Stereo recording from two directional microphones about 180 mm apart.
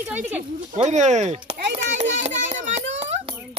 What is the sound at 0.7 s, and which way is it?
Speech, 40° right (ahead or behind).